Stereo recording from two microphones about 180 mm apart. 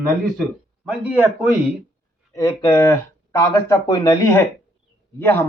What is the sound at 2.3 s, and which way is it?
Speech, 20° left (ahead or behind).